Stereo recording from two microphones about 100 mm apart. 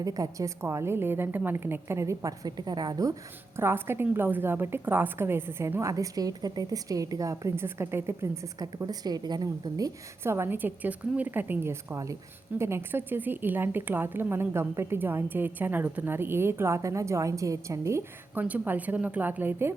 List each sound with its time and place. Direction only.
0.0 s a woman's voice: 35° right (ahead or behind)
3.6 s a woman's voice: 25° right (ahead or behind)
8.6 s a woman's voice: 40° right (ahead or behind)
10.2 s a woman's voice: 25° right (ahead or behind)
18.3 s a woman's voice: 15° right (ahead or behind)